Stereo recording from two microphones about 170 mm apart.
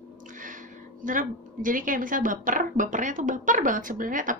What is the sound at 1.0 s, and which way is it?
Speech, 50° right (ahead or behind).